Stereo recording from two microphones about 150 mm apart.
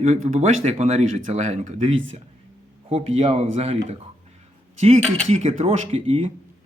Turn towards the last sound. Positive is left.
turn(degrees=-40)  # may be behind; listen again after turning